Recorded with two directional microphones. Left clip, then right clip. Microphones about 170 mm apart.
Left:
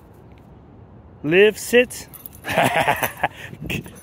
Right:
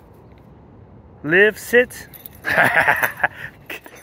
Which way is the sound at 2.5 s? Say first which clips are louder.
Right 3 dB; 65° left (ahead or behind).